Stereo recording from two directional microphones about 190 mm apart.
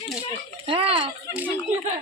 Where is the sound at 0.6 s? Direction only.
30° right (ahead or behind).